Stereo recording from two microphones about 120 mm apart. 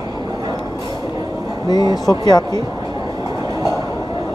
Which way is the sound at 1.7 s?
35° left (ahead or behind).